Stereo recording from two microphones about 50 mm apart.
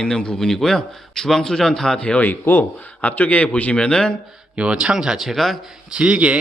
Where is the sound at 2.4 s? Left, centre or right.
Left.